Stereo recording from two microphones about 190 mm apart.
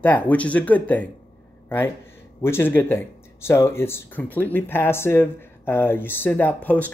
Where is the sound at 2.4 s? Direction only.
10° left (ahead or behind).